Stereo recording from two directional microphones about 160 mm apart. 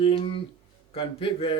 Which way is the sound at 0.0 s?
35° left (ahead or behind).